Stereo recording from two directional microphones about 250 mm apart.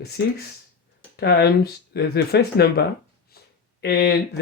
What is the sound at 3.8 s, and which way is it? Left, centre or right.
Speech, left.